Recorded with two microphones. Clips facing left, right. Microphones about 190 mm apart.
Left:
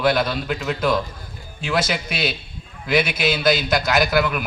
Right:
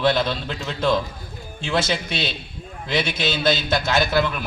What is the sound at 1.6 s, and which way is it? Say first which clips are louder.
Speech: even; 25° right (ahead or behind).